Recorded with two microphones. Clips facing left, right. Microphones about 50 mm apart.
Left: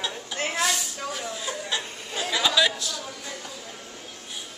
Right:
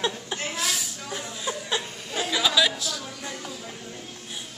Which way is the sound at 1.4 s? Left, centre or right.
Centre.